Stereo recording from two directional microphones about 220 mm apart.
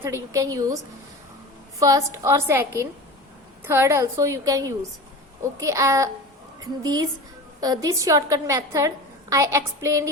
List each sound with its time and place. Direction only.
0.0 s a woman's voice: 15° right (ahead or behind)
1.8 s a woman's voice: 15° right (ahead or behind)